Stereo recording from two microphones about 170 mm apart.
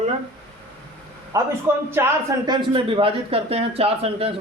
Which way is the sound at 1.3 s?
20° right (ahead or behind).